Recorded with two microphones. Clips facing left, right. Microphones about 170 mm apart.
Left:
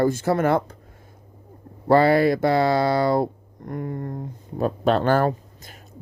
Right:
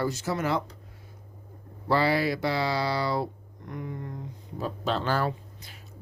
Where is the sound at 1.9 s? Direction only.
50° left (ahead or behind).